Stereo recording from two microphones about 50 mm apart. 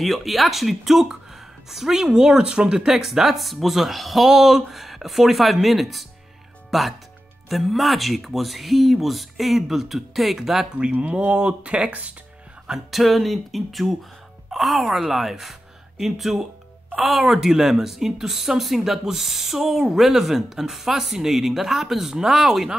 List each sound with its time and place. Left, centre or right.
0.0 s speech: centre
10.7 s speech: right
12.6 s speech: centre